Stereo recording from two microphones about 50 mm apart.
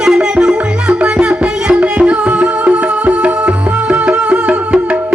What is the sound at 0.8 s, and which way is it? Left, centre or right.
Music, right.